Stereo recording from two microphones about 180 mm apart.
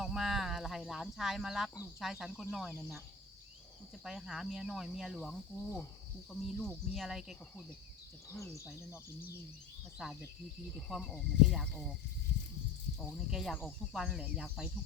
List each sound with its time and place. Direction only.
0.0 s a sound: 5° right (ahead or behind)
2.0 s speech: centre (ahead or behind)
4.0 s speech: centre (ahead or behind)
8.3 s speech: 15° left (ahead or behind)
10.8 s speech: centre (ahead or behind)
13.1 s speech: centre (ahead or behind)